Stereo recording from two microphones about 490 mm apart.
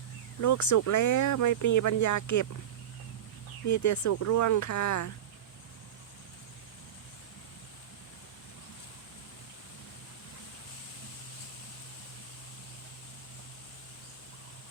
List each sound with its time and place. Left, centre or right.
0.4 s speech: left
3.7 s speech: left